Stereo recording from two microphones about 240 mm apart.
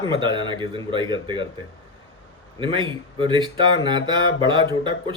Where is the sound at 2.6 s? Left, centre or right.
Right.